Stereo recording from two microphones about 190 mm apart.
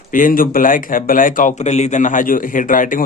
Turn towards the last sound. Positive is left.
turn(degrees=45)  # may be behind; listen again after turning